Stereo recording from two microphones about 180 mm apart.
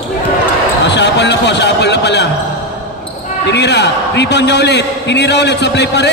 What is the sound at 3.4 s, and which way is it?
A man's voice, 70° left (ahead or behind).